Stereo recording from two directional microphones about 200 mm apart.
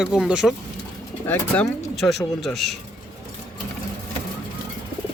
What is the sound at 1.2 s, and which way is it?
Speech, 10° left (ahead or behind).